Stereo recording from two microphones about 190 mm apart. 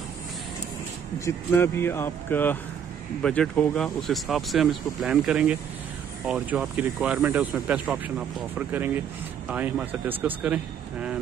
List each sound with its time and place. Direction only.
1.2 s a man's voice: 10° left (ahead or behind); by 11.1 s 5° right (ahead or behind)